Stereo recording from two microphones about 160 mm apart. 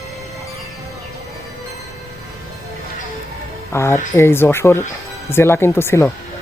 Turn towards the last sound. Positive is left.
turn(degrees=15)  # may be behind; listen again after turning